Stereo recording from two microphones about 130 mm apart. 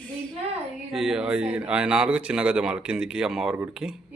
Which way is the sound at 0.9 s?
5° right (ahead or behind).